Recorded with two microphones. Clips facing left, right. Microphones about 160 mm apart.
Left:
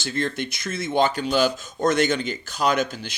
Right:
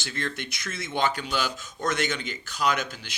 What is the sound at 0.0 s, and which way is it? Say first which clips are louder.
Speech: left 7 dB; 35° left (ahead or behind).